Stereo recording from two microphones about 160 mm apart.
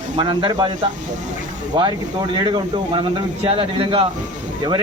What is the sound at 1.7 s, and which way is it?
Speech, 30° right (ahead or behind).